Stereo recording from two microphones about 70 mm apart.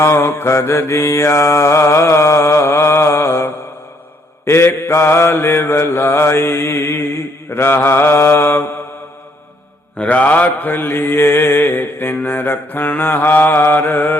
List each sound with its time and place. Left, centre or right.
0.0 s mantra: left
10.0 s mantra: left